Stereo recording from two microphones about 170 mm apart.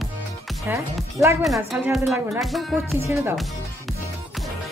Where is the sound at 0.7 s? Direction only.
10° right (ahead or behind).